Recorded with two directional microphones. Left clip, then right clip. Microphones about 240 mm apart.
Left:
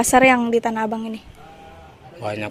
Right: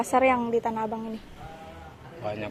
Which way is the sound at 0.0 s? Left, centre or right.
Left.